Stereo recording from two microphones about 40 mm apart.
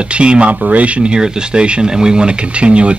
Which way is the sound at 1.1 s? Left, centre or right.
Centre.